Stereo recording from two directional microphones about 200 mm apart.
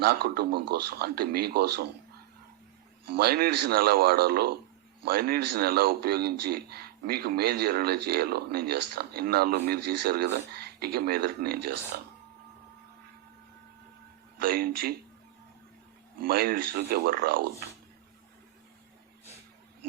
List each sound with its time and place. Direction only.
0.0 s speech: 50° right (ahead or behind)
3.1 s speech: 50° right (ahead or behind)
14.3 s speech: 50° right (ahead or behind)
16.2 s speech: 50° right (ahead or behind)